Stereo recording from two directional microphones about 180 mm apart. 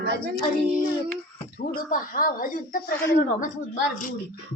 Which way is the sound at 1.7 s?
50° left (ahead or behind).